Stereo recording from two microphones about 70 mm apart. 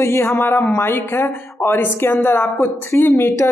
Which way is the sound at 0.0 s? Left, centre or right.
Left.